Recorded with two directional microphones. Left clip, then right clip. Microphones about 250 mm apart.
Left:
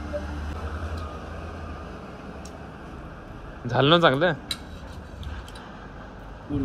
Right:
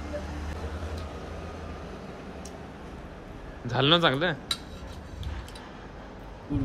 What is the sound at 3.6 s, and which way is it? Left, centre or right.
Speech, centre.